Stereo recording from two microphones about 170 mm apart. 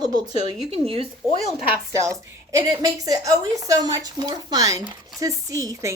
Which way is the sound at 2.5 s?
20° right (ahead or behind).